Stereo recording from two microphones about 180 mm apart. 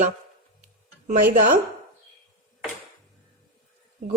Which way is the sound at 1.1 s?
55° right (ahead or behind).